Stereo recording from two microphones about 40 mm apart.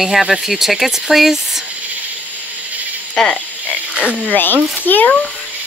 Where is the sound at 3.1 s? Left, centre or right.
Centre.